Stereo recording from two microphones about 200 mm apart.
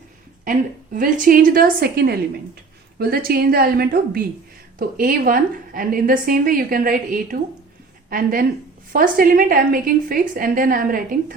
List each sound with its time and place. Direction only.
0.4 s a woman's voice: 40° right (ahead or behind)